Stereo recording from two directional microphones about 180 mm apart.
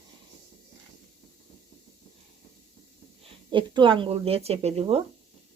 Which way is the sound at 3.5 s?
25° right (ahead or behind).